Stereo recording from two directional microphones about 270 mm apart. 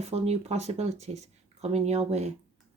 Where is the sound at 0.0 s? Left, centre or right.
Right.